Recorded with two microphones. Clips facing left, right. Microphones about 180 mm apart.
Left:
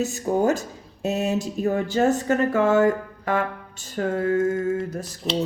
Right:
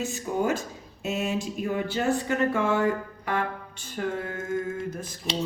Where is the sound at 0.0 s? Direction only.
40° left (ahead or behind).